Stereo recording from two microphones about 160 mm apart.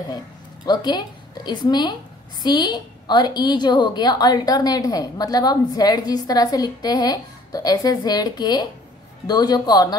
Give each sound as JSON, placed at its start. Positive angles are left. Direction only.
{"t": 0.7, "sound": "a woman's voice", "side_deg": 25}